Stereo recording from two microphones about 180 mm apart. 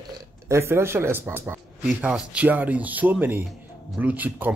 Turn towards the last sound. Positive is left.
turn(degrees=-10)  # may be behind; listen again after turning